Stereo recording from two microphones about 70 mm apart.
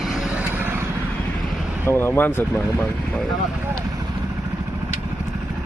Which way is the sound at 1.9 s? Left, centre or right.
Left.